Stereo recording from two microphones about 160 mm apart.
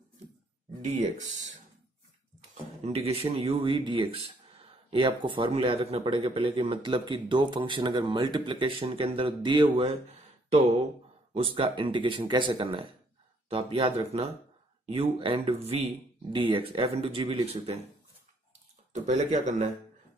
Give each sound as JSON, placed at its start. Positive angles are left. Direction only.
{"t": 1.1, "sound": "speech", "side_deg": -50}
{"t": 2.8, "sound": "speech", "side_deg": -40}
{"t": 11.3, "sound": "speech", "side_deg": -35}
{"t": 19.0, "sound": "speech", "side_deg": -45}